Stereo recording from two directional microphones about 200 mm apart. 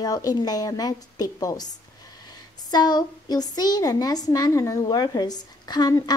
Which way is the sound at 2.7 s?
20° left (ahead or behind).